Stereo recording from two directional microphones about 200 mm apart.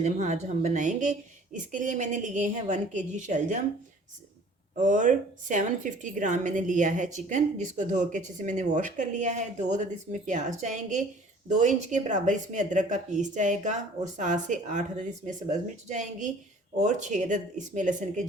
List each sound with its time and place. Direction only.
0.0 s a woman's voice: 35° right (ahead or behind)
4.8 s a woman's voice: 40° right (ahead or behind)